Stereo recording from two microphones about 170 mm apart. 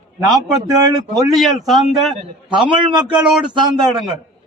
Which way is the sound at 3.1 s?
5° right (ahead or behind).